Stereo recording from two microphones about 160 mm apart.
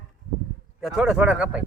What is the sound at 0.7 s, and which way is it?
Speech, 5° right (ahead or behind).